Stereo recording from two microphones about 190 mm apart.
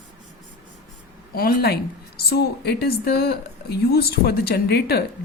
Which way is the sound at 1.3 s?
55° left (ahead or behind).